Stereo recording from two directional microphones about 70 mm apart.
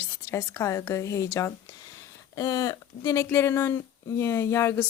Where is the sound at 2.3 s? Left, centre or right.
Left.